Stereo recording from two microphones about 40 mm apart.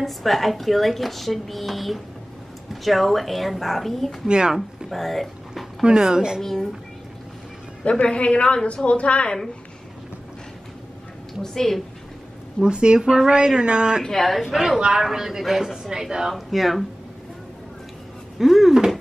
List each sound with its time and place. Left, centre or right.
0.0 s speech: centre
5.9 s speech: centre
6.4 s speech: centre
8.0 s a woman's voice: left
11.4 s a woman's voice: centre
12.6 s speech: right
13.0 s speech: centre
13.3 s speech: right
14.0 s speech: centre
16.3 s speech: centre
18.4 s a sound: centre